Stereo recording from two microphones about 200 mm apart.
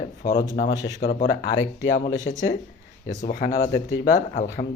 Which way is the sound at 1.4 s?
55° left (ahead or behind).